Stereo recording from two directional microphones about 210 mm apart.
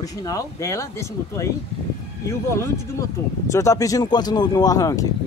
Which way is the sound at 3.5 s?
15° left (ahead or behind).